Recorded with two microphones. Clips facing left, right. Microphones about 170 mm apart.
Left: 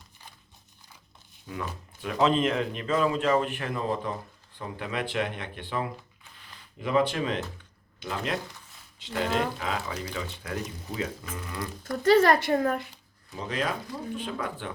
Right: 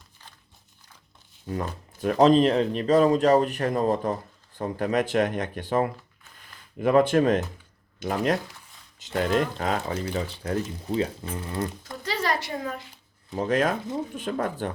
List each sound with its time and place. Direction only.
1.5 s speech: 40° right (ahead or behind)
11.8 s speech: 50° left (ahead or behind)
13.3 s speech: 50° right (ahead or behind)